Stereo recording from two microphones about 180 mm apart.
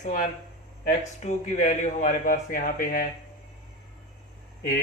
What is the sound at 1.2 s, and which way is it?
Speech, 40° left (ahead or behind).